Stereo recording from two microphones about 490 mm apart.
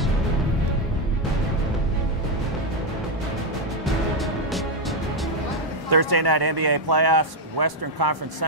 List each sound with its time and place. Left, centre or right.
3.8 s music: centre
5.9 s a man's voice: right